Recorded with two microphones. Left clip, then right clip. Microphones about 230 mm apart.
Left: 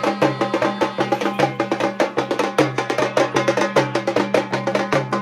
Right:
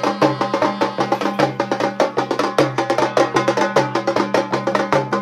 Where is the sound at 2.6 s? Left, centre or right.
Right.